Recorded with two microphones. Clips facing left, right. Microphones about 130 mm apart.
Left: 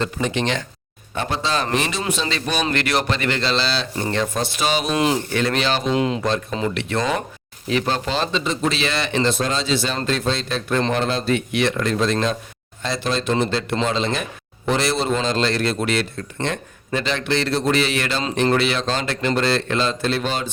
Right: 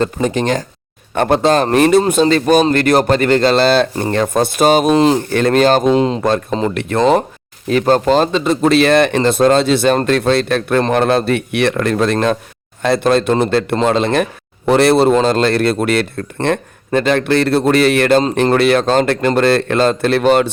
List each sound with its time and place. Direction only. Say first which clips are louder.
0.0 s speech: right 6 dB; 40° right (ahead or behind)
1.1 s speech: right 11 dB; 55° right (ahead or behind)
4.9 s speech: right 8 dB; 35° right (ahead or behind)
5.3 s speech: right 9 dB; 45° right (ahead or behind)
5.9 s speech: right 7 dB; 30° right (ahead or behind)
6.7 s speech: right 9 dB; 50° right (ahead or behind)